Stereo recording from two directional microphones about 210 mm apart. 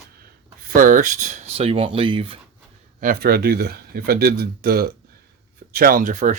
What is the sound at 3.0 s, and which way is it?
Speech, 45° right (ahead or behind).